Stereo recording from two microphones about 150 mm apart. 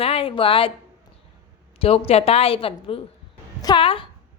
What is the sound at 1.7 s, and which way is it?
A woman's voice, 40° left (ahead or behind).